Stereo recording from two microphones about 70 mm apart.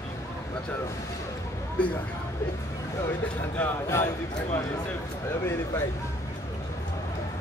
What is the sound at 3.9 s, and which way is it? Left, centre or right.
Speech, left.